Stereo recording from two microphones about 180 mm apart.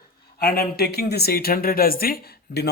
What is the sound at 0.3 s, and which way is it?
Speech, 55° left (ahead or behind).